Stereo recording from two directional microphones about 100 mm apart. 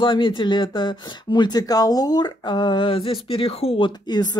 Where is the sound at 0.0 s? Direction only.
55° left (ahead or behind).